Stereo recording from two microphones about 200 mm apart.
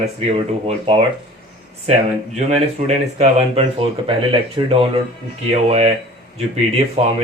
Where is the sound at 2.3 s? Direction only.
35° right (ahead or behind).